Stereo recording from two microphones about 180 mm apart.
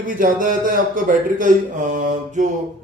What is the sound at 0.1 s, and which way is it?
Speech, 50° right (ahead or behind).